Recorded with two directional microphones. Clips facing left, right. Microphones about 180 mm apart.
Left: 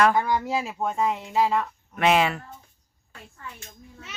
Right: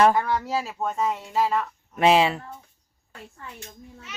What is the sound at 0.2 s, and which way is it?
Speech, 10° left (ahead or behind).